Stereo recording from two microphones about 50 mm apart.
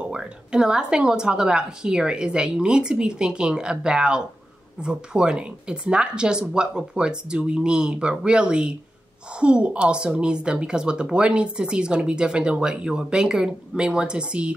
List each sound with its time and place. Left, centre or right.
0.1 s a woman's voice: centre